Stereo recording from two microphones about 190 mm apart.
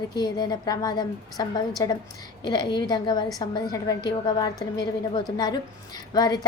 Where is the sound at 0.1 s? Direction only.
20° left (ahead or behind).